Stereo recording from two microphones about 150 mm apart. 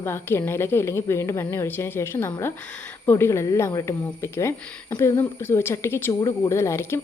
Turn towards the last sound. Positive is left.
turn(degrees=15)  # may be behind; listen again after turning